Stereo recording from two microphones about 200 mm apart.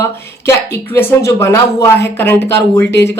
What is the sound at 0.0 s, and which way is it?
Speech, 15° left (ahead or behind).